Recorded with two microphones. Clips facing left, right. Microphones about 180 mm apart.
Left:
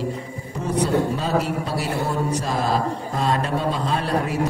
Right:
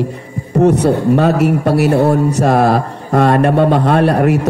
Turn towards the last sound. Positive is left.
turn(degrees=-70)  # may be behind; listen again after turning